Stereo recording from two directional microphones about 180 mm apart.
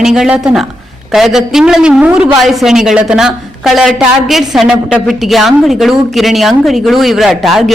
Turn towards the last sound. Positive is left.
turn(degrees=0)  # may be behind; listen again after turning